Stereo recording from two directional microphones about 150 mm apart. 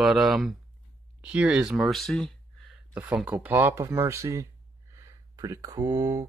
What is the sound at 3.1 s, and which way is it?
Speech, 10° right (ahead or behind).